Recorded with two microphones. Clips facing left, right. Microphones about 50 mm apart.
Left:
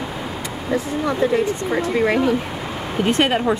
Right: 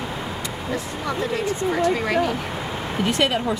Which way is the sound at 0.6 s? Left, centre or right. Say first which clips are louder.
Left 7 dB; centre.